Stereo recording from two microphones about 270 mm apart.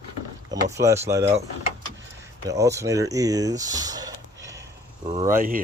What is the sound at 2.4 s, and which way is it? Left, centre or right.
Speech, centre.